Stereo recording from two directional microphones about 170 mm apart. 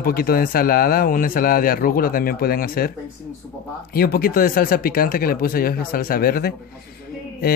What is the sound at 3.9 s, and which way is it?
Speech, 60° left (ahead or behind).